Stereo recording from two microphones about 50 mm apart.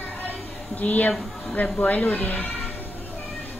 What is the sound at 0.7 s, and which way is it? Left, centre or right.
A woman's voice, left.